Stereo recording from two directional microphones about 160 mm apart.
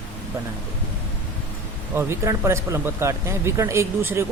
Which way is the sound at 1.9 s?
15° right (ahead or behind).